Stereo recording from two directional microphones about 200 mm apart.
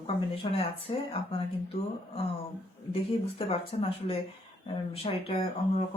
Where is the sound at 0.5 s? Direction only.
30° left (ahead or behind).